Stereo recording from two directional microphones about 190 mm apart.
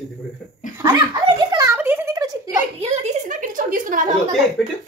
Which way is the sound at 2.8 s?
35° right (ahead or behind).